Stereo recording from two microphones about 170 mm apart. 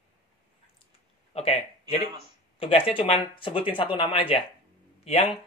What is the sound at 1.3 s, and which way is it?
Speech, 35° left (ahead or behind).